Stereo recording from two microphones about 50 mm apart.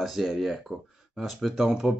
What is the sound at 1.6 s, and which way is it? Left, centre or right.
Speech, centre.